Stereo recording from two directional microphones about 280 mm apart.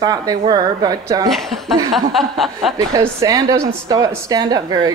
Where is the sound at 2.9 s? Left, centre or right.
Centre.